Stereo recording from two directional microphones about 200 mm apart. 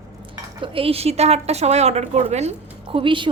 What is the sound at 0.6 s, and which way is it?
A woman's voice, 25° right (ahead or behind).